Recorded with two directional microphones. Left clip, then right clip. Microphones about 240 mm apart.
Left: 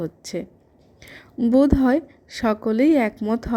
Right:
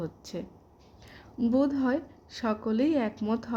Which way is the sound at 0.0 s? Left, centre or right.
Centre.